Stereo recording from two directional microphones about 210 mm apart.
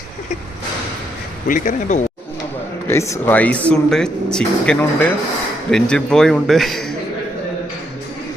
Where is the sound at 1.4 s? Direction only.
40° left (ahead or behind).